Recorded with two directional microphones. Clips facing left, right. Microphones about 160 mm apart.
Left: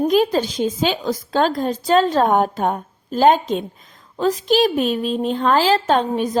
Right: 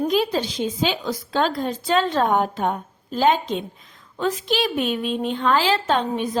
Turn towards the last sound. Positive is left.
turn(degrees=45)  # may be behind; listen again after turning